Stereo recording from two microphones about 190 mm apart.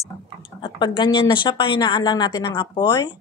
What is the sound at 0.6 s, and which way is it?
Speech, 25° left (ahead or behind).